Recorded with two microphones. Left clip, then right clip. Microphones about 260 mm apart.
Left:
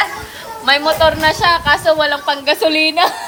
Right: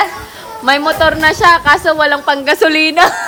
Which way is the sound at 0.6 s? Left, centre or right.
Right.